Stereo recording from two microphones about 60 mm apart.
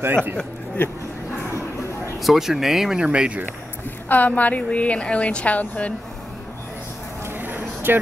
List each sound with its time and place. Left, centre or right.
0.0 s a man's voice: right
0.8 s a woman's voice: left
2.2 s speech: centre
3.0 s speech: centre
4.1 s a woman's voice: left
7.3 s a sound: right